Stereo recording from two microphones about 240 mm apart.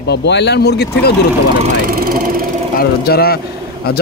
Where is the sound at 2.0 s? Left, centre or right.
Right.